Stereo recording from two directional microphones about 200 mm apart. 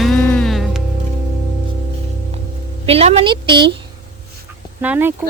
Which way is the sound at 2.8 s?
30° right (ahead or behind).